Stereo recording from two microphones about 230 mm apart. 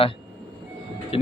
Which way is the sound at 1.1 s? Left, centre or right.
Left.